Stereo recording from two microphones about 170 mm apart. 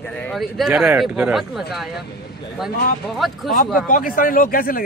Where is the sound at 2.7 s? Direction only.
65° left (ahead or behind).